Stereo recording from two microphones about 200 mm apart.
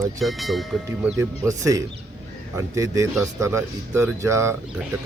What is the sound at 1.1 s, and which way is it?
Speech, 15° right (ahead or behind).